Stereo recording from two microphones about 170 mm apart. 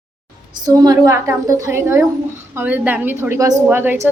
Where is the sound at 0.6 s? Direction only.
20° right (ahead or behind).